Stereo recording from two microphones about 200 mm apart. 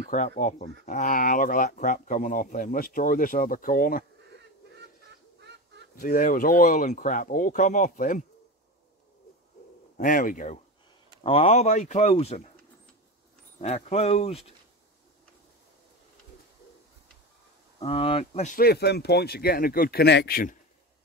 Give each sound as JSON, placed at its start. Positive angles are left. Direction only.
{"t": 0.0, "sound": "speech", "side_deg": 40}
{"t": 5.4, "sound": "fowl", "side_deg": -60}
{"t": 5.9, "sound": "speech", "side_deg": 45}
{"t": 9.9, "sound": "speech", "side_deg": 40}
{"t": 11.2, "sound": "speech", "side_deg": 30}
{"t": 13.6, "sound": "speech", "side_deg": 35}
{"t": 17.7, "sound": "speech", "side_deg": 30}
{"t": 18.6, "sound": "speech", "side_deg": 55}